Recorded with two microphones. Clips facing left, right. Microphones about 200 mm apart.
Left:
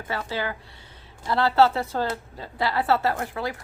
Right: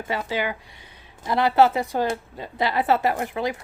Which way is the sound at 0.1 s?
15° right (ahead or behind).